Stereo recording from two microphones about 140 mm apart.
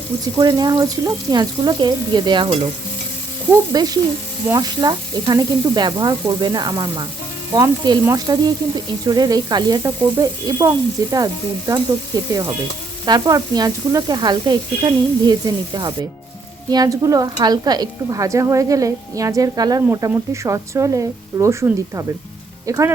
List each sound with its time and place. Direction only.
0.3 s speech: 30° right (ahead or behind)
3.7 s speech: 30° right (ahead or behind)
13.1 s speech: 25° right (ahead or behind)